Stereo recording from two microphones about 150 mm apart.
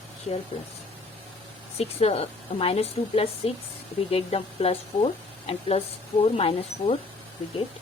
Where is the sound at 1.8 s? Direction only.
45° left (ahead or behind).